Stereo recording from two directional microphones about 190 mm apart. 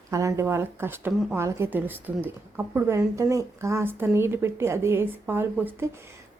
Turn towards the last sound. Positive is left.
turn(degrees=-10)  # may be behind; listen again after turning